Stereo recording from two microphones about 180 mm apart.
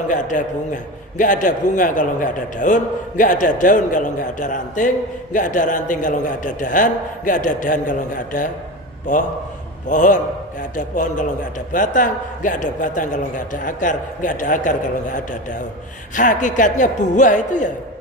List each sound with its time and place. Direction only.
0.1 s a man's voice: 45° left (ahead or behind)
9.8 s a man's voice: 45° left (ahead or behind)
11.7 s a man's voice: 45° left (ahead or behind)